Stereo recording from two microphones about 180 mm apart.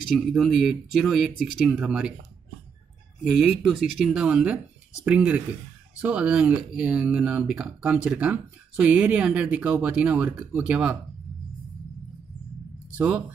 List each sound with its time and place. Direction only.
0.3 s speech: centre (ahead or behind)
3.3 s speech: 5° right (ahead or behind)
12.9 s speech: 5° right (ahead or behind)